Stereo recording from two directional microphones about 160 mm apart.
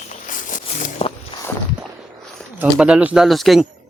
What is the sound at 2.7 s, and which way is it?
Speech, 5° right (ahead or behind).